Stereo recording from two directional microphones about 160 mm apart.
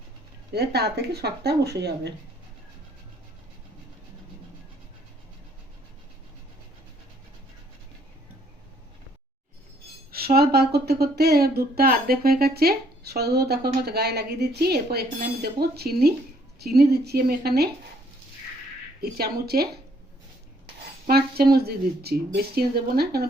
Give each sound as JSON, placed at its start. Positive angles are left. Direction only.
{"t": 0.5, "sound": "speech", "side_deg": -90}
{"t": 10.1, "sound": "speech", "side_deg": -70}
{"t": 19.0, "sound": "speech", "side_deg": -75}
{"t": 21.1, "sound": "speech", "side_deg": -75}